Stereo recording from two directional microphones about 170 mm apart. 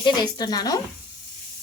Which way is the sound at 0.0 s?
25° left (ahead or behind).